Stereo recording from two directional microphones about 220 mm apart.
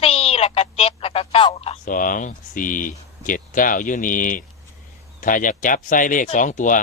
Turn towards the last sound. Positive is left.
turn(degrees=35)  # may be behind; listen again after turning